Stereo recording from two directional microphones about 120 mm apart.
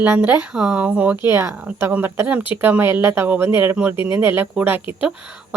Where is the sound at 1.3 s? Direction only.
20° right (ahead or behind).